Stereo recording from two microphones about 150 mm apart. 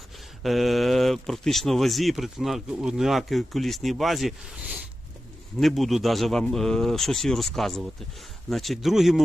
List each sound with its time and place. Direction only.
0.4 s speech: centre (ahead or behind)